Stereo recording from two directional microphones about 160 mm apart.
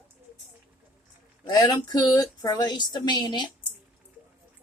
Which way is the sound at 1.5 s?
25° left (ahead or behind).